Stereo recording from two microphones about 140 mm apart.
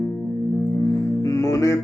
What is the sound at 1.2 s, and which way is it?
Music, 25° left (ahead or behind).